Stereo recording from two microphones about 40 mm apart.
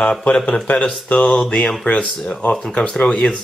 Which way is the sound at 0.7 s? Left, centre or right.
Left.